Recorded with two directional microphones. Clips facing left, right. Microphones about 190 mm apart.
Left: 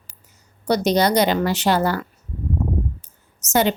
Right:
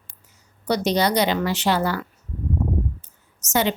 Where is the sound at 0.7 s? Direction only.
45° left (ahead or behind).